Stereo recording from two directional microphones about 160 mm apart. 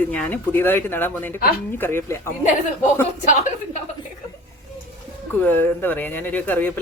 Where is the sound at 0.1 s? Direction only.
10° left (ahead or behind).